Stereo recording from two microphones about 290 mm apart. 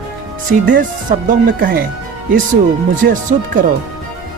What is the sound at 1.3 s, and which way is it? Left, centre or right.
Speech, right.